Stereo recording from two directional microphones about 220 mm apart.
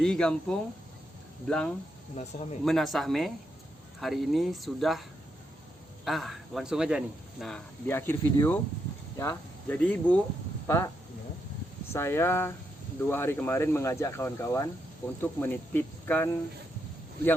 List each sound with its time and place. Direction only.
0.0 s a man's voice: 5° left (ahead or behind)
2.3 s a man's voice: 35° left (ahead or behind)
2.6 s a man's voice: centre (ahead or behind)
6.1 s a man's voice: centre (ahead or behind)
7.9 s speech: 10° left (ahead or behind)